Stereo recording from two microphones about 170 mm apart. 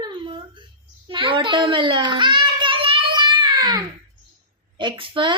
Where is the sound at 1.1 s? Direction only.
30° right (ahead or behind).